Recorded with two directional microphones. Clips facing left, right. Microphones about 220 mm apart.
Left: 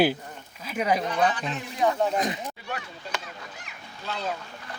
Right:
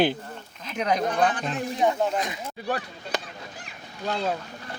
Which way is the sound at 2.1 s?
40° left (ahead or behind).